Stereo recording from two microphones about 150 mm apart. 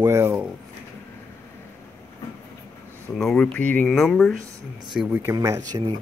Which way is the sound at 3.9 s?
Centre (ahead or behind).